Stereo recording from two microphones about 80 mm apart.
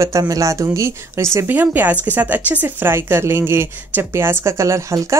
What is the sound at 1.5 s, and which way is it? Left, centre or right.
Speech, right.